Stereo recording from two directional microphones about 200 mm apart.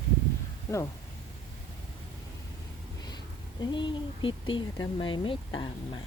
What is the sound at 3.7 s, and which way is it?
Speech, 25° left (ahead or behind).